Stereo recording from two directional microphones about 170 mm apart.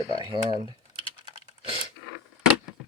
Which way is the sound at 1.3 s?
35° right (ahead or behind).